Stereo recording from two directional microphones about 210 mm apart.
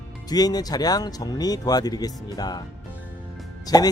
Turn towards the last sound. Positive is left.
turn(degrees=20)  # may be behind; listen again after turning